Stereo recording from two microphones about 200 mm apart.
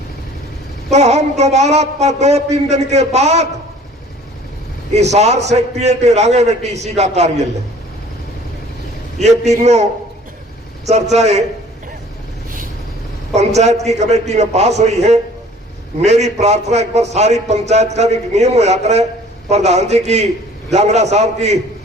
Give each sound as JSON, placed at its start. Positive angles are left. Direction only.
{"t": 0.9, "sound": "a man's voice", "side_deg": -35}
{"t": 5.1, "sound": "a man's voice", "side_deg": -35}
{"t": 9.4, "sound": "a man's voice", "side_deg": -35}
{"t": 13.3, "sound": "a man's voice", "side_deg": -35}